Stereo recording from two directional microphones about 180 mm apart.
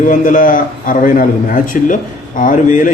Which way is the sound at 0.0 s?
45° left (ahead or behind).